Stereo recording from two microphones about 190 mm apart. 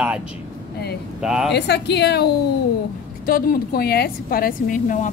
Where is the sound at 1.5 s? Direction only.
60° left (ahead or behind).